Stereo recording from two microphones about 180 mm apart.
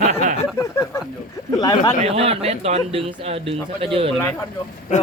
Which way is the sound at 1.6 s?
20° left (ahead or behind).